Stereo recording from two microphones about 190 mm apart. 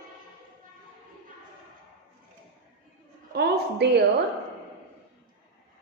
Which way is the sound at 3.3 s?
55° right (ahead or behind).